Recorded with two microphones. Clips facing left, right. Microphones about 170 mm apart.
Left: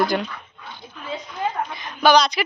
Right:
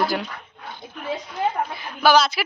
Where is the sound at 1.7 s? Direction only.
5° right (ahead or behind).